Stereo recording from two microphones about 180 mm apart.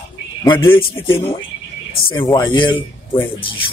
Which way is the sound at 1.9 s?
30° left (ahead or behind).